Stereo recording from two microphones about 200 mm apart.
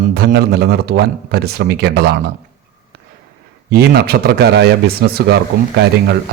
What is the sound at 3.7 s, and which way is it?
A man's voice, 50° right (ahead or behind).